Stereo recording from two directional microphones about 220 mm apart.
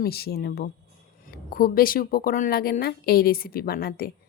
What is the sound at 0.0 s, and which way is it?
A woman's voice, 45° left (ahead or behind).